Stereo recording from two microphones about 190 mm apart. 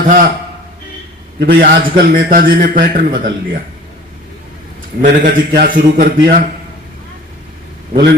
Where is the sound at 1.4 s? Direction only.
50° right (ahead or behind).